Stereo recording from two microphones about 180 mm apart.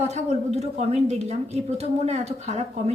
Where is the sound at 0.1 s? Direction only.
35° right (ahead or behind).